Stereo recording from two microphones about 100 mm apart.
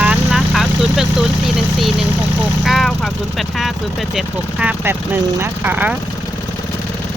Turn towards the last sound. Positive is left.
turn(degrees=-15)  # may be behind; listen again after turning